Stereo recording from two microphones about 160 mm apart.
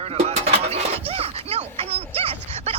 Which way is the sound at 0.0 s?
40° right (ahead or behind).